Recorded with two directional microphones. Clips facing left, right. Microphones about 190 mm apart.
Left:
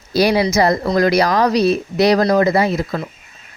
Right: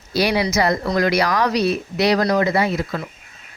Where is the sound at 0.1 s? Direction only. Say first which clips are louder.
Left 4 dB; 40° left (ahead or behind).